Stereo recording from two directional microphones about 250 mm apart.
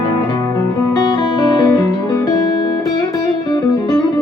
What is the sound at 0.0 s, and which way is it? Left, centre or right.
Guitar, centre.